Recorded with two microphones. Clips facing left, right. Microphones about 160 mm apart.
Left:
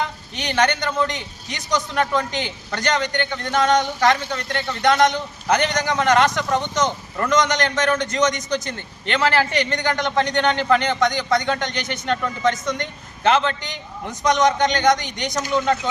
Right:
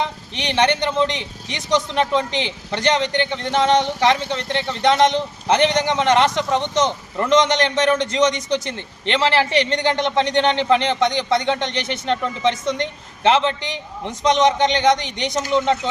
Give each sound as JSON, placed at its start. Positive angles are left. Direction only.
{"t": 0.0, "sound": "a man's voice", "side_deg": -30}